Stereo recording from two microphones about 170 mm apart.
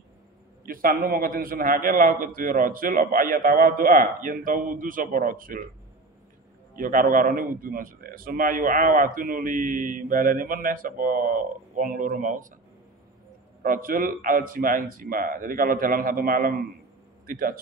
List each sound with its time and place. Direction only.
0.7 s a man's voice: 55° right (ahead or behind)
6.7 s a man's voice: 55° right (ahead or behind)
13.6 s a man's voice: 55° right (ahead or behind)